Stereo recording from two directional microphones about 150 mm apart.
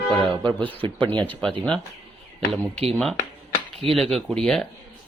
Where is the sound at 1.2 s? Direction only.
10° left (ahead or behind).